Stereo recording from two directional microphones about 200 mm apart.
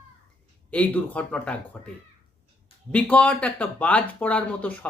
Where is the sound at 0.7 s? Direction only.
5° left (ahead or behind).